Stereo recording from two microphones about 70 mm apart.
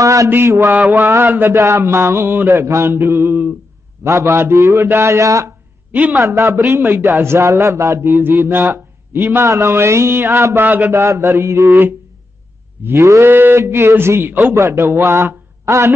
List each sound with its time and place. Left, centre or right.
0.0 s mantra: right
1.5 s speech: right
4.0 s mantra: right
4.4 s speech: right
4.8 s mantra: right
5.9 s a sound: right
6.2 s mantra: right
6.8 s a man's voice: right
7.2 s mantra: right
8.5 s speech: right
9.4 s mantra: right
12.9 s mantra: right
13.3 s a man's voice: right